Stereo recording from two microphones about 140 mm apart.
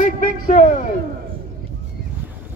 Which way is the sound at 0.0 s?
65° left (ahead or behind).